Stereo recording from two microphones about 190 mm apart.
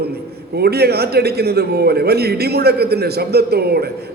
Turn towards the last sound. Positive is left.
turn(degrees=-55)  # may be behind; listen again after turning